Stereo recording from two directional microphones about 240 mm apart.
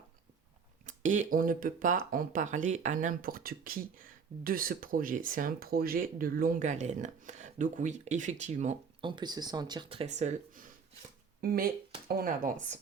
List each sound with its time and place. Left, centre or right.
0.9 s speech: right